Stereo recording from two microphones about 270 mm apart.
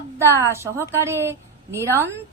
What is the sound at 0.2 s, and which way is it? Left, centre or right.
A woman's voice, centre.